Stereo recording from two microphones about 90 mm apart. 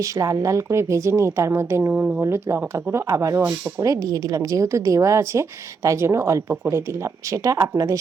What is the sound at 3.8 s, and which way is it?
Speech, 40° right (ahead or behind).